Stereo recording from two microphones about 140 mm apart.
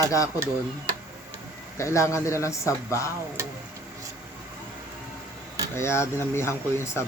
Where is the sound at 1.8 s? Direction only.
20° left (ahead or behind).